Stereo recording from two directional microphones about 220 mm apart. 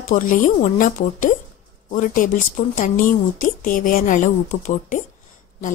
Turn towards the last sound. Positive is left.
turn(degrees=35)  # may be behind; listen again after turning